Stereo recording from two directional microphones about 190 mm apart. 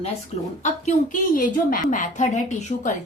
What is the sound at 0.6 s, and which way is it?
A woman's voice, 40° left (ahead or behind).